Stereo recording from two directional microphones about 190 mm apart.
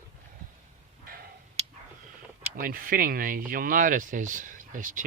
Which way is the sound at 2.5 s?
50° right (ahead or behind).